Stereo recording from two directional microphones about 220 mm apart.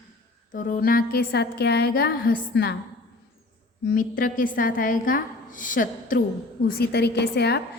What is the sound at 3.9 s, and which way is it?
A woman's voice, 40° left (ahead or behind).